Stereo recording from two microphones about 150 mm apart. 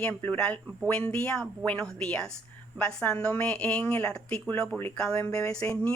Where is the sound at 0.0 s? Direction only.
10° left (ahead or behind).